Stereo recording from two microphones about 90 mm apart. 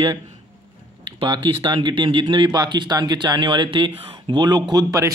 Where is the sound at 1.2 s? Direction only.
55° right (ahead or behind).